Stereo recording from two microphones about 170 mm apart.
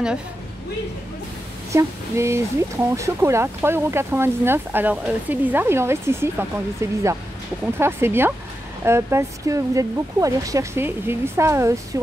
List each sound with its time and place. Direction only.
1.7 s speech: 15° right (ahead or behind)